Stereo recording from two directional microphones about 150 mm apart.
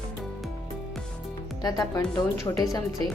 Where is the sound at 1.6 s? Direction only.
25° left (ahead or behind).